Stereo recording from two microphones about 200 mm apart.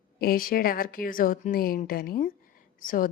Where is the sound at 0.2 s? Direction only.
45° left (ahead or behind).